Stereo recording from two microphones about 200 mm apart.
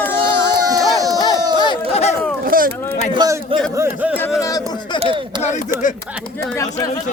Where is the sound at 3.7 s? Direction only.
10° right (ahead or behind).